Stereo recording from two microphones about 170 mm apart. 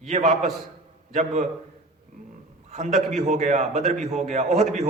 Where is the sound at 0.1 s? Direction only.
45° right (ahead or behind).